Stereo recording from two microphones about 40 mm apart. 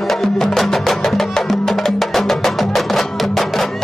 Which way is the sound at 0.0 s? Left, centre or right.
Centre.